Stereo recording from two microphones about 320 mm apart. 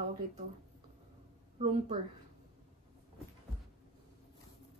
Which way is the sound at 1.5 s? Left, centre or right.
Right.